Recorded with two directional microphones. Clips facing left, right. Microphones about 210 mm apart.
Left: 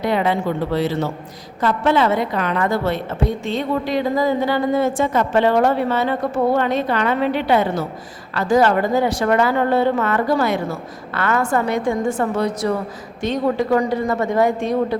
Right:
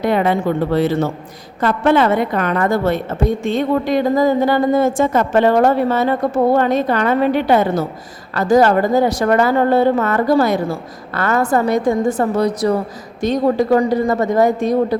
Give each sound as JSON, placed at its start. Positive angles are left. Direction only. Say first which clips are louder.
{"t": 0.0, "sound": "a woman's voice", "louder": "right 3 dB", "side_deg": -50}